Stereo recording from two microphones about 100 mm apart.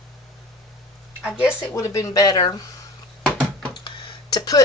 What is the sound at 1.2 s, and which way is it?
Speech, 10° right (ahead or behind).